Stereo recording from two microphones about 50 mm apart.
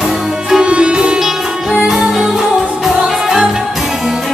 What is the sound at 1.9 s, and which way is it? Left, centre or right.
Music, centre.